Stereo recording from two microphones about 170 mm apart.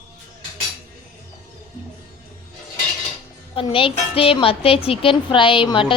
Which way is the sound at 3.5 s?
30° left (ahead or behind).